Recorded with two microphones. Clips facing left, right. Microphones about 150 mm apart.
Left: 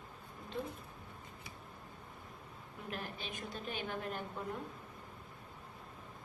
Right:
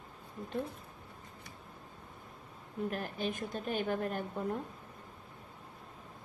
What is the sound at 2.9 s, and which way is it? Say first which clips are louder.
A woman's voice: right 6 dB; 45° right (ahead or behind).